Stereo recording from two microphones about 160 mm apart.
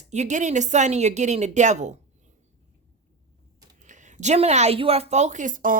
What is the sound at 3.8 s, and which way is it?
A woman's voice, 50° right (ahead or behind).